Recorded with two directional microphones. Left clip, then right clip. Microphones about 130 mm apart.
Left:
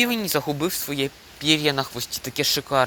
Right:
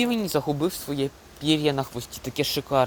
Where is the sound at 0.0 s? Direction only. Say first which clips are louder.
Left 2 dB; 10° right (ahead or behind).